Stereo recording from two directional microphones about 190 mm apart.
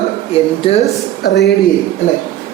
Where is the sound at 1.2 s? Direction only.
60° left (ahead or behind).